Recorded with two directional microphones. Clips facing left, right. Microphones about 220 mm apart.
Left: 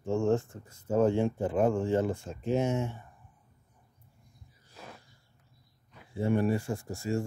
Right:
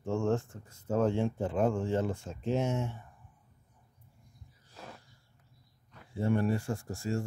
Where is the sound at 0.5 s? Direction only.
5° left (ahead or behind).